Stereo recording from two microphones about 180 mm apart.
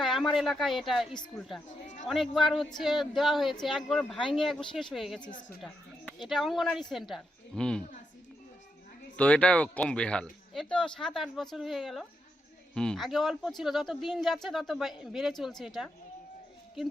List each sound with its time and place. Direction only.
0.0 s speech: centre (ahead or behind)
5.3 s a woman's voice: 45° left (ahead or behind)
5.6 s a woman's voice: centre (ahead or behind)
9.1 s speech: 5° left (ahead or behind)